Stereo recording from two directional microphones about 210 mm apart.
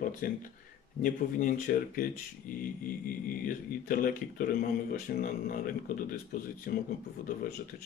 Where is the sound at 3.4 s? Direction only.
40° left (ahead or behind).